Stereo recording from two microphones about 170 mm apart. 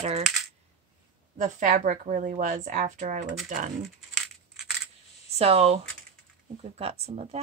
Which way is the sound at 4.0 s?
Centre (ahead or behind).